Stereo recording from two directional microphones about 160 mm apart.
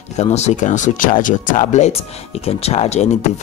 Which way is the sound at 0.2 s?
45° left (ahead or behind).